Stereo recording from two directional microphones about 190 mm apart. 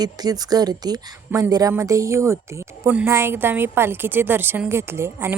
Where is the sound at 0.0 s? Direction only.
20° right (ahead or behind).